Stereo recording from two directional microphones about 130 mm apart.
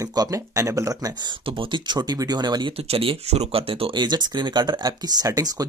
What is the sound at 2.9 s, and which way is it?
Speech, 50° right (ahead or behind).